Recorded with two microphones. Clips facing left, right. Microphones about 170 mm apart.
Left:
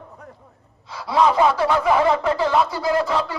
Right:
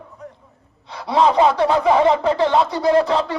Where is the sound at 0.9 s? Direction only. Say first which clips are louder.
Right 2 dB; 25° right (ahead or behind).